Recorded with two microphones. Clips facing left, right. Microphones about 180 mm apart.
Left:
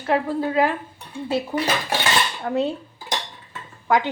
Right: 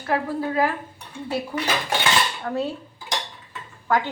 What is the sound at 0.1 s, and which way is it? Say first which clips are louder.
Speech: left 3 dB; 25° left (ahead or behind).